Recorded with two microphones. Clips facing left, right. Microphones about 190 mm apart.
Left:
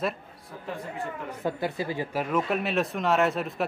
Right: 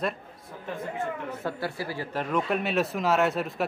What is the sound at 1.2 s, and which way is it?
Speech, 15° left (ahead or behind).